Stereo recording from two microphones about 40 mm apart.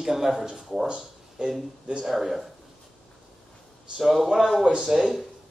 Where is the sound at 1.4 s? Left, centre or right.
Right.